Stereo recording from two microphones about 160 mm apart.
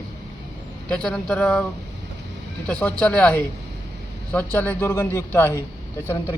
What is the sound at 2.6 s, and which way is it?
Speech, 10° left (ahead or behind).